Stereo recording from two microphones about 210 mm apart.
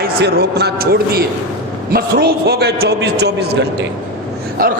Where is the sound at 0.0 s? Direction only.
50° right (ahead or behind).